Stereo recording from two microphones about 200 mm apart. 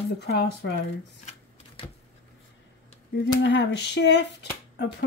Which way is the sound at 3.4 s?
60° left (ahead or behind).